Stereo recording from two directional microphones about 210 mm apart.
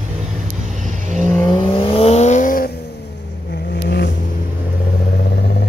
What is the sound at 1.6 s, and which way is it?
Vehicle, 30° left (ahead or behind).